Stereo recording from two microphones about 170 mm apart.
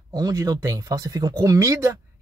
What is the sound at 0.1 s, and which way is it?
Speech, 20° right (ahead or behind).